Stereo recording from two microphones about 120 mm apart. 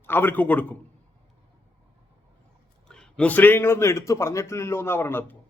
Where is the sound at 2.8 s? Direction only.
5° left (ahead or behind).